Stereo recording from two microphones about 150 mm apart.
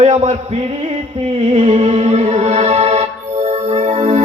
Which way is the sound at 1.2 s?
45° right (ahead or behind).